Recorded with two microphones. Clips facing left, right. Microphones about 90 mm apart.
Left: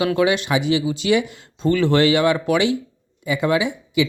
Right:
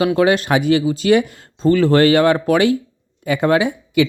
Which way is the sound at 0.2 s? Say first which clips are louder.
Right 4 dB; 45° right (ahead or behind).